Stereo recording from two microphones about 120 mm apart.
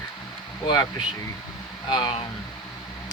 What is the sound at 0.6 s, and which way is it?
Speech, 30° left (ahead or behind).